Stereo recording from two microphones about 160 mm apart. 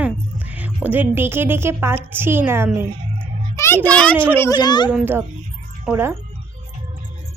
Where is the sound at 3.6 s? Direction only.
15° left (ahead or behind).